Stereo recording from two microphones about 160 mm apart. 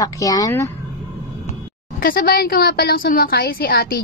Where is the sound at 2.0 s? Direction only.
65° left (ahead or behind).